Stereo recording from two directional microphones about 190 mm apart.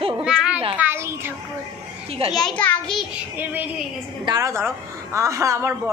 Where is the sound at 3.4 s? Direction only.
10° right (ahead or behind).